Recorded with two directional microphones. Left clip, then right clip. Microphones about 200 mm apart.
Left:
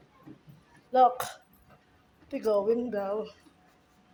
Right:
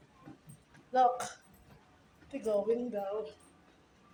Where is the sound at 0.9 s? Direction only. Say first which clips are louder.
Left 5 dB; 35° left (ahead or behind).